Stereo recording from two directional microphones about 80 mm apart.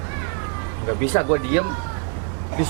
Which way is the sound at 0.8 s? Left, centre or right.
Right.